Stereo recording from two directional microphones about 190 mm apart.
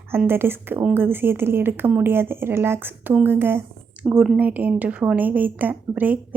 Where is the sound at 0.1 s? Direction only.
10° right (ahead or behind).